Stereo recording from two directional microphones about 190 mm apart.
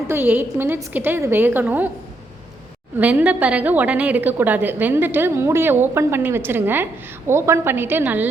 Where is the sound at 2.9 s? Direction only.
10° right (ahead or behind).